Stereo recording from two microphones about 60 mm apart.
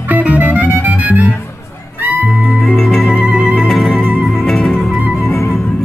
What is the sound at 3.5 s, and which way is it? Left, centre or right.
Music, centre.